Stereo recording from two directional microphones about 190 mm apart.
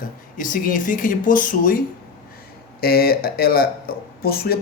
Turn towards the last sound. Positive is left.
turn(degrees=55)  # may be behind; listen again after turning